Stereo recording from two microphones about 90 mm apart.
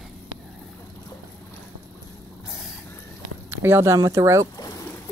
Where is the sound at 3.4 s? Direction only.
30° right (ahead or behind).